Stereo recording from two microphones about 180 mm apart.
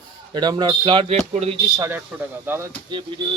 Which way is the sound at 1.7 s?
15° right (ahead or behind).